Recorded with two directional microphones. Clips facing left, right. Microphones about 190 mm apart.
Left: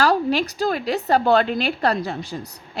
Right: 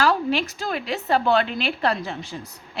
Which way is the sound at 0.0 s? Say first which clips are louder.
Left 2 dB; 40° left (ahead or behind).